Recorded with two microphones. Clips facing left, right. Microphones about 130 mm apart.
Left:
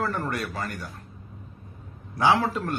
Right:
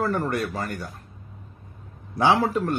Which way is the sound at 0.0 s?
20° right (ahead or behind).